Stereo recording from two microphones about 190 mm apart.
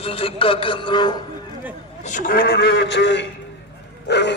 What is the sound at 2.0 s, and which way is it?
A man's voice, 45° left (ahead or behind).